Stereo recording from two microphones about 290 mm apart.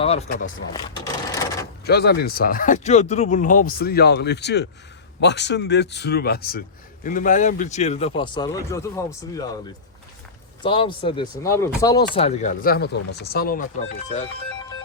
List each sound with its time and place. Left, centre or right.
0.0 s speech: left
0.7 s speech: centre
1.8 s a man's voice: left; by 9.5 s centre
10.6 s a man's voice: centre